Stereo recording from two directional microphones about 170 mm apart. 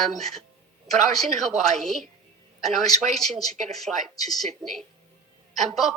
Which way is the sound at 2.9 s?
45° right (ahead or behind).